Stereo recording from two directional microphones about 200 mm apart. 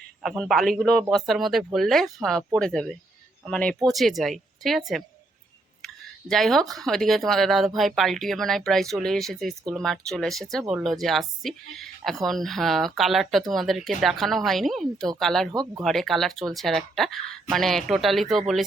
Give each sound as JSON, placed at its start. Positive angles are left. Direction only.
{"t": 0.2, "sound": "speech", "side_deg": 0}
{"t": 5.8, "sound": "speech", "side_deg": 0}